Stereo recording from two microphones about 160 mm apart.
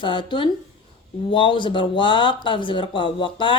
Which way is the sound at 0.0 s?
30° left (ahead or behind).